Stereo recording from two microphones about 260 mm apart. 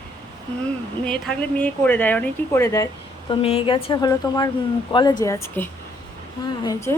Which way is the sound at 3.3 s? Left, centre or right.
Left.